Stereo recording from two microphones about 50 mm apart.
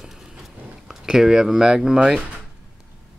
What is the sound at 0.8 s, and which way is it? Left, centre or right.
Speech, centre.